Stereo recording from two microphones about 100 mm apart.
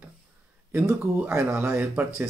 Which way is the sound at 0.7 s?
20° right (ahead or behind).